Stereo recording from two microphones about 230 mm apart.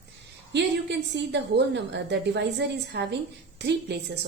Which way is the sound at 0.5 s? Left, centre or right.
Right.